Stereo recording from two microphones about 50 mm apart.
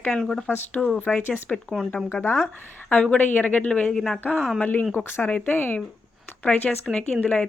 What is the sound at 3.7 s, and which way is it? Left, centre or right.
Speech, left.